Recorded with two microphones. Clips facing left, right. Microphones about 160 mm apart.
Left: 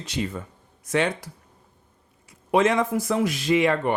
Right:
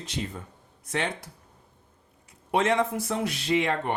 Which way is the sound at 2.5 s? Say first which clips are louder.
Left 4 dB; 90° left.